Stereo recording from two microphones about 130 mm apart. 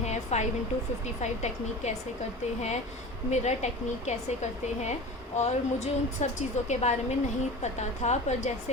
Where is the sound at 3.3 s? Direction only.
60° left (ahead or behind).